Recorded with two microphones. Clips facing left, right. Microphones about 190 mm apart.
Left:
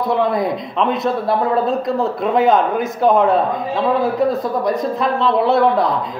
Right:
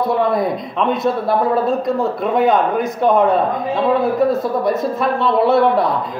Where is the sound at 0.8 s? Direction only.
Centre (ahead or behind).